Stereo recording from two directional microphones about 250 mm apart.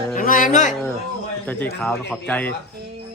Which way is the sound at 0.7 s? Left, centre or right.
Centre.